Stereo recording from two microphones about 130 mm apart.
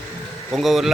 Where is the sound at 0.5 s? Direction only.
Centre (ahead or behind).